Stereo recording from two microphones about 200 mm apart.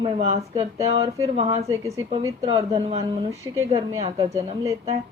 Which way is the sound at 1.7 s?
15° right (ahead or behind).